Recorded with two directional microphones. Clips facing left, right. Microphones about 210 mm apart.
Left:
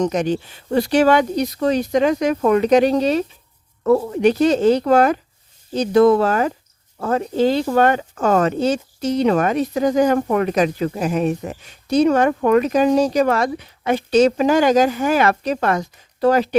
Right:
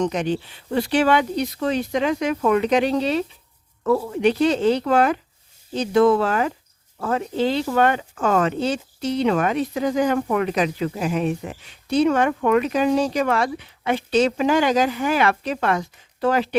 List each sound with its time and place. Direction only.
0.0 s speech: 45° left (ahead or behind)